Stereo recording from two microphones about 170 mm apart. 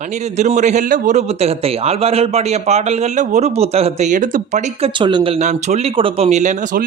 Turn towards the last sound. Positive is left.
turn(degrees=-50)  # may be behind; listen again after turning